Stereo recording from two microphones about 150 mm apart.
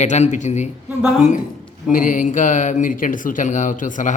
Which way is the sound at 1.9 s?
60° left (ahead or behind).